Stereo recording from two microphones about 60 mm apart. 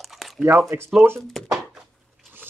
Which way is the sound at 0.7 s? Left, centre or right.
Right.